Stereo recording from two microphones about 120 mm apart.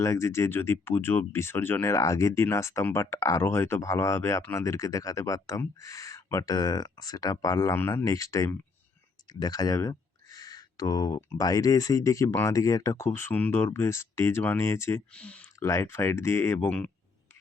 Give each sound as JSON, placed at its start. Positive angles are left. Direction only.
{"t": 0.0, "sound": "speech", "side_deg": 25}
{"t": 9.3, "sound": "a sound", "side_deg": 35}
{"t": 11.3, "sound": "speech", "side_deg": 30}
{"t": 15.1, "sound": "speech", "side_deg": 10}
{"t": 15.6, "sound": "speech", "side_deg": 25}
{"t": 16.6, "sound": "speech", "side_deg": 10}